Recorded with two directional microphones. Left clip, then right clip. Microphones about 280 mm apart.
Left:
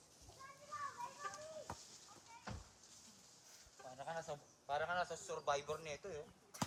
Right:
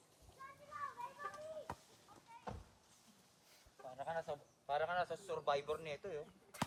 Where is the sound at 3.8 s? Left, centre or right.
Right.